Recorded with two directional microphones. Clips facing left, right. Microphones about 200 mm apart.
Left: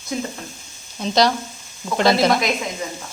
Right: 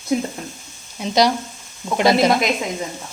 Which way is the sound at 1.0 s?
15° right (ahead or behind).